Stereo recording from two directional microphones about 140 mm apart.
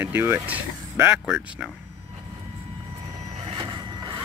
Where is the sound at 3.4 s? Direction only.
45° right (ahead or behind).